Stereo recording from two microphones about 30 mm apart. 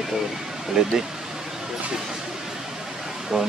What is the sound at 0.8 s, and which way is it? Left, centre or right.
Speech, right.